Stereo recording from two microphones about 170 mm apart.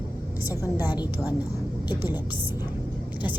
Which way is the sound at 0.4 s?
15° right (ahead or behind).